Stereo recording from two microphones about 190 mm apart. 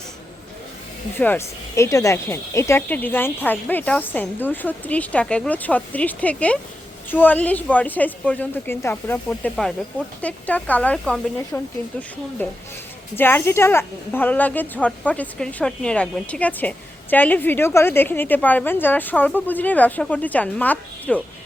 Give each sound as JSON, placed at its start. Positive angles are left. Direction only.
{"t": 1.1, "sound": "speech", "side_deg": 10}